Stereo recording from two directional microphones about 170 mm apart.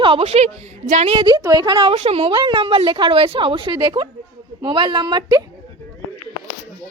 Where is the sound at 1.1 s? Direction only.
30° right (ahead or behind).